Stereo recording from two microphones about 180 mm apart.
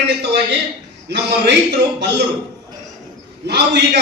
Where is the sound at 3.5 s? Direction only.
75° right (ahead or behind).